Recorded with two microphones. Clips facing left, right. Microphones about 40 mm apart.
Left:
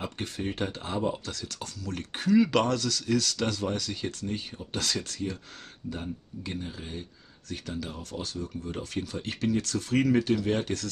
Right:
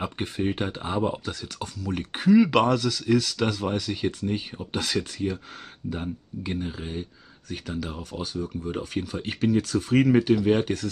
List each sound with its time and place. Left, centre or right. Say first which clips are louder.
0.0 s speech: right 6 dB; centre